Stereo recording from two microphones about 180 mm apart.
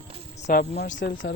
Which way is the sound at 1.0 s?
80° left.